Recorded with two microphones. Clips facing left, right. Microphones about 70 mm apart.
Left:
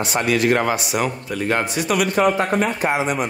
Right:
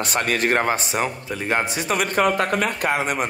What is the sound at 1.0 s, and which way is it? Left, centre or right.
Speech, centre.